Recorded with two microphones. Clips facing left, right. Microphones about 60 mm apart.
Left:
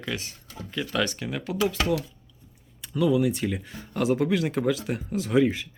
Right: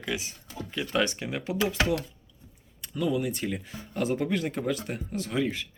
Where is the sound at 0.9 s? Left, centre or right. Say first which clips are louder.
Right 1 dB; right.